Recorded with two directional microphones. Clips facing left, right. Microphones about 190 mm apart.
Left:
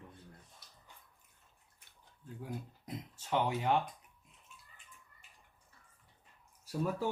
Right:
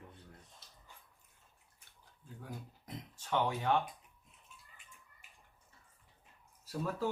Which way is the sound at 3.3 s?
15° left (ahead or behind).